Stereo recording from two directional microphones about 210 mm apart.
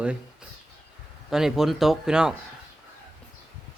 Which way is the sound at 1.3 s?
Centre (ahead or behind).